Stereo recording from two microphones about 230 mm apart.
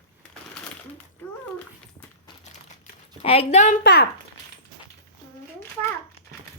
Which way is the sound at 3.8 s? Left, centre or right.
Left.